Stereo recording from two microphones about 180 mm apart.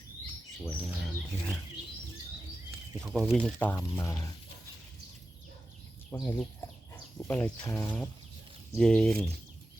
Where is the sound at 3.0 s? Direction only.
Centre (ahead or behind); by 4.3 s 15° left (ahead or behind).